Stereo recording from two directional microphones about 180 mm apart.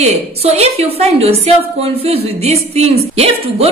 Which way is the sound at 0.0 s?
35° right (ahead or behind).